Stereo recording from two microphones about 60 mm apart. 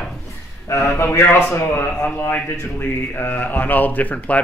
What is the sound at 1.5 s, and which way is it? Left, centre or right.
Speech, left.